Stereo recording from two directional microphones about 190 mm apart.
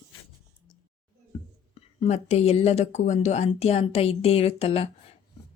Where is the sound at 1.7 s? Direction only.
35° left (ahead or behind).